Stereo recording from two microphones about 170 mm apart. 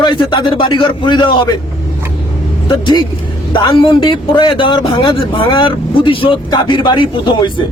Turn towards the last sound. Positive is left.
turn(degrees=30)  # may be behind; listen again after turning